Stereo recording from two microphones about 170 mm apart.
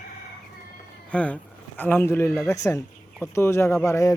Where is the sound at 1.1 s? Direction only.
10° left (ahead or behind).